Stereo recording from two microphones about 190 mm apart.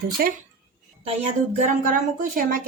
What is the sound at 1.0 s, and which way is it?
Speech, 35° right (ahead or behind).